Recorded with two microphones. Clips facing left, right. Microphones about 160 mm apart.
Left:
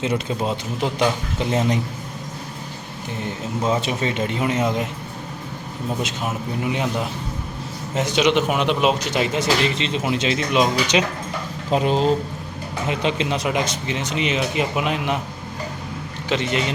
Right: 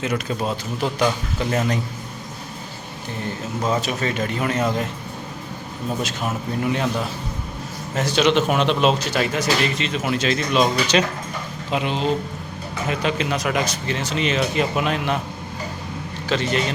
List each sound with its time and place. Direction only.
0.0 s speech: 20° left (ahead or behind)
3.6 s speech: 25° left (ahead or behind)
6.7 s speech: 15° left (ahead or behind)
11.7 s speech: 40° left (ahead or behind)
12.9 s speech: 25° left (ahead or behind)
16.3 s speech: 20° left (ahead or behind)